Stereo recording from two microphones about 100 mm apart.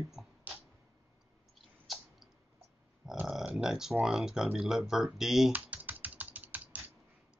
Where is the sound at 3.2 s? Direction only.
5° right (ahead or behind).